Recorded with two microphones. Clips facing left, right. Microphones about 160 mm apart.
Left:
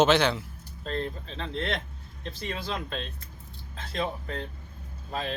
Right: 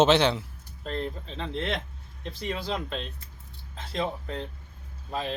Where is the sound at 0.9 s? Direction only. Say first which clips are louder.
Even; 15° right (ahead or behind).